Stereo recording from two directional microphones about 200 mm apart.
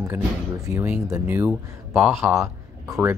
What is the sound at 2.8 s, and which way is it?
Speech, 15° right (ahead or behind).